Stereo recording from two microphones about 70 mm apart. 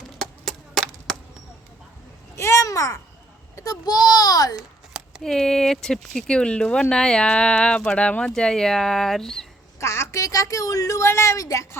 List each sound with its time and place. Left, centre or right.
0.2 s wood: centre
2.3 s a sound: left
3.5 s a child's voice: left
4.5 s a sound: centre
5.2 s speech: centre
9.8 s a woman's voice: left